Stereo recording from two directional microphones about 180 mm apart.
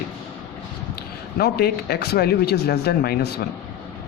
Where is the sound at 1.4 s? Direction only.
60° left (ahead or behind).